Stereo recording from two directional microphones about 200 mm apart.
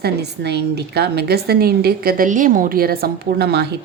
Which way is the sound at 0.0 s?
55° right (ahead or behind).